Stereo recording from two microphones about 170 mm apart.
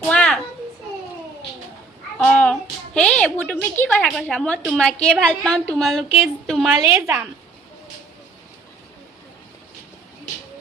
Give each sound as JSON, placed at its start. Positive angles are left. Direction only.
{"t": 0.0, "sound": "children playing", "side_deg": 5}
{"t": 2.1, "sound": "a child's voice", "side_deg": 5}
{"t": 6.7, "sound": "a woman's voice", "side_deg": -15}